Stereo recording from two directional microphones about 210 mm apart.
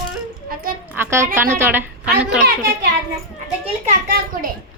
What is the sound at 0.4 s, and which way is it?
Speech, 45° right (ahead or behind).